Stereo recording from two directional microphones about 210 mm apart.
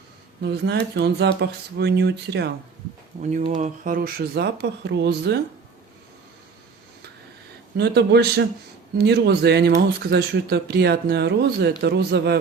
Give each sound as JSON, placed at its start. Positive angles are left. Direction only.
{"t": 0.4, "sound": "speech", "side_deg": -55}
{"t": 3.2, "sound": "speech", "side_deg": -35}
{"t": 7.8, "sound": "speech", "side_deg": -50}